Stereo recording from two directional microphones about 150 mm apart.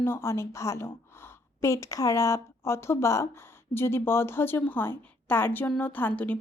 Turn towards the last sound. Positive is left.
turn(degrees=10)  # may be behind; listen again after turning